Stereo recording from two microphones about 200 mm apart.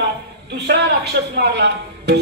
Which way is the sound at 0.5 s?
55° right (ahead or behind).